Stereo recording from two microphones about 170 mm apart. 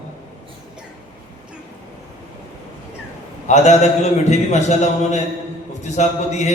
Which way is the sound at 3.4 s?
45° left (ahead or behind).